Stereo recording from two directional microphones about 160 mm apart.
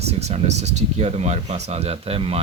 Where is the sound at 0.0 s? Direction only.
40° right (ahead or behind).